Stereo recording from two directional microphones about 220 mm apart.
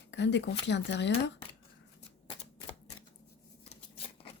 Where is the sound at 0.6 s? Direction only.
50° left (ahead or behind).